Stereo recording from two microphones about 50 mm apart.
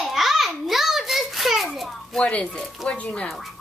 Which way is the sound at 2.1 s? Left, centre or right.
Left.